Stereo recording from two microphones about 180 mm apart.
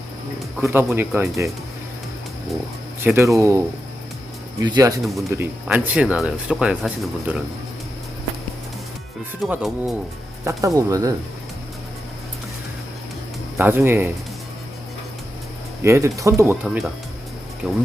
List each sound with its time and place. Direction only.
0.6 s speech: 10° right (ahead or behind)
3.0 s speech: 10° right (ahead or behind)
4.6 s speech: 20° right (ahead or behind)
5.4 s speech: 10° right (ahead or behind)
9.5 s speech: 5° right (ahead or behind)
10.4 s speech: 20° right (ahead or behind)
13.6 s speech: 10° right (ahead or behind)
15.8 s speech: 15° right (ahead or behind)
16.6 s speech: centre (ahead or behind)